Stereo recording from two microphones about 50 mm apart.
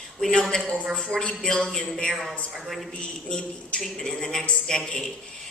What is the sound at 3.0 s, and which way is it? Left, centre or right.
Speech, centre.